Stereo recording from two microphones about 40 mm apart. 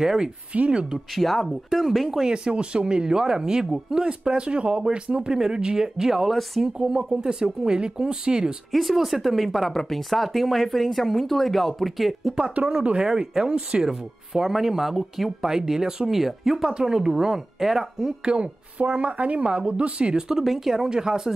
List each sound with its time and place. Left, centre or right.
0.0 s speech: centre
0.5 s speech: right
1.1 s speech: centre
2.2 s speech: right
8.7 s speech: centre
12.6 s a woman's voice: right
13.0 s speech: centre
13.8 s speech: centre
18.2 s speech: right
18.8 s a woman's voice: right
20.2 s speech: centre